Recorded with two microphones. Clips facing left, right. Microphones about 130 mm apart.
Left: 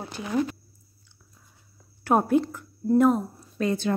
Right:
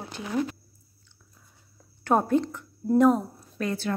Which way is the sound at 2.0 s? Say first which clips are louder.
Left 1 dB; 10° left (ahead or behind).